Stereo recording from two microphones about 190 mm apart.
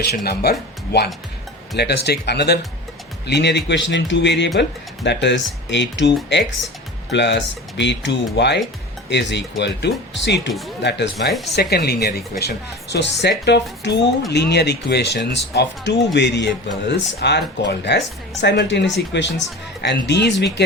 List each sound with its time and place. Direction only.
0.0 s speech: 55° left (ahead or behind)
11.3 s speech: centre (ahead or behind)
11.5 s speech: 55° left (ahead or behind)